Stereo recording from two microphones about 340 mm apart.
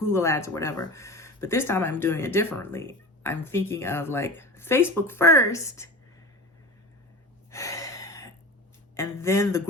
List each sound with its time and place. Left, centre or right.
0.0 s speech: centre
7.5 s a sound: centre
9.0 s speech: centre